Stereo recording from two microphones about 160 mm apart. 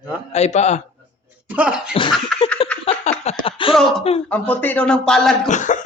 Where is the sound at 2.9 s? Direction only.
35° left (ahead or behind).